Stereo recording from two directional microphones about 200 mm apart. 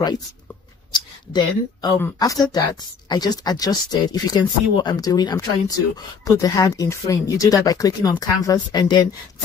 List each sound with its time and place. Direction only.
0.9 s speech: 20° left (ahead or behind)